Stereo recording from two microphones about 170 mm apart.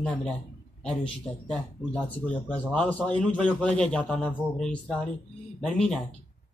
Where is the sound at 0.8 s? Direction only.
5° left (ahead or behind).